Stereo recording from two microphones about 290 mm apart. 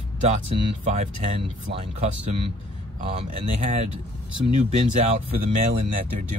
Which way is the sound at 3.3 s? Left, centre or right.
Right.